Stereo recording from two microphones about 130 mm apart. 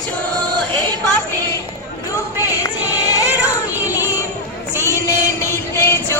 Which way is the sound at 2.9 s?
30° left (ahead or behind).